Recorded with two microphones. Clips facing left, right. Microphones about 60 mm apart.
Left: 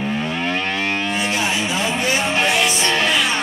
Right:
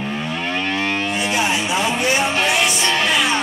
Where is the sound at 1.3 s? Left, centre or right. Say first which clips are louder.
Right 5 dB; centre.